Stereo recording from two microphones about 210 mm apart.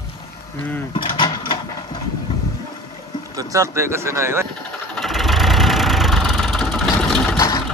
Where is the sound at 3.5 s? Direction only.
15° right (ahead or behind).